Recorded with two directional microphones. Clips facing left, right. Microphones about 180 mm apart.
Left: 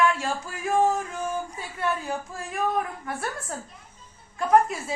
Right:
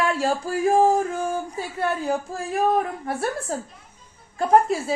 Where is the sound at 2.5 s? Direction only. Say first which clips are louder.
Right 5 dB; 30° right (ahead or behind).